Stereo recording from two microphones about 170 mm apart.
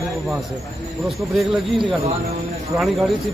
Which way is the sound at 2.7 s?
Centre (ahead or behind).